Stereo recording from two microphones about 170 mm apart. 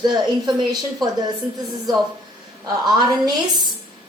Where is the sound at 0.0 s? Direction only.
25° right (ahead or behind).